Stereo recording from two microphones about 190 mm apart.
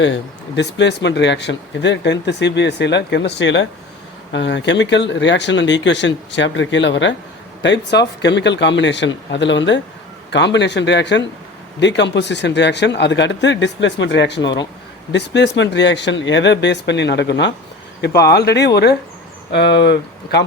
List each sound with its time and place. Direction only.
0.0 s speech: 70° left (ahead or behind)